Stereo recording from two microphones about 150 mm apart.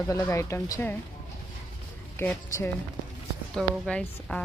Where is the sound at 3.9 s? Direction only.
5° left (ahead or behind).